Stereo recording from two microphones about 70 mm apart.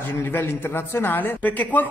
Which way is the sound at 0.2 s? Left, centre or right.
Left.